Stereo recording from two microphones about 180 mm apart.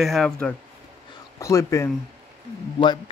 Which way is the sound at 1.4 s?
15° left (ahead or behind).